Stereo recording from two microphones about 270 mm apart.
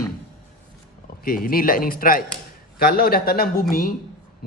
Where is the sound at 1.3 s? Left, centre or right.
Left.